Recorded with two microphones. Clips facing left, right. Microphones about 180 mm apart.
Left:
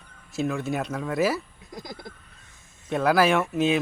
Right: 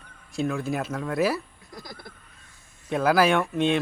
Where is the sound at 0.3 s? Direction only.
Centre (ahead or behind).